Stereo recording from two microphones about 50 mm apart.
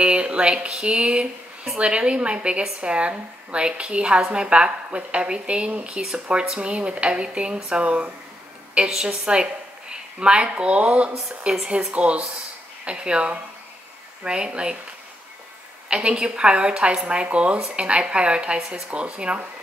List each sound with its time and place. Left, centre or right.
0.0 s a woman's voice: right
11.2 s a woman's voice: centre
11.9 s a woman's voice: right
15.9 s a woman's voice: centre